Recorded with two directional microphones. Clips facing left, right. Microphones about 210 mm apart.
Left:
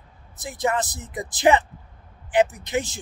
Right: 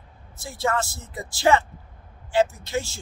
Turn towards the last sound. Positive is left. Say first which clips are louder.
# left 2 dB
turn(degrees=20)  # may be behind; listen again after turning